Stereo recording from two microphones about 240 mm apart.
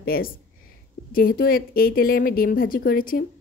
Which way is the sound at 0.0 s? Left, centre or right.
Left.